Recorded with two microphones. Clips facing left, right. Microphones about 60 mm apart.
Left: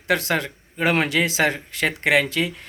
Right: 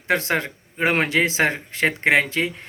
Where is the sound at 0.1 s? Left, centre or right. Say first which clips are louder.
Even; right.